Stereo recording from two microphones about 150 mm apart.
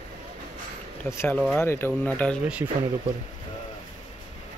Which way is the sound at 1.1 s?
15° left (ahead or behind).